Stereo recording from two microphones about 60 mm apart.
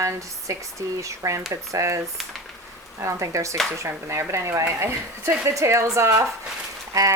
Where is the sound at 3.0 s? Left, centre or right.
Right.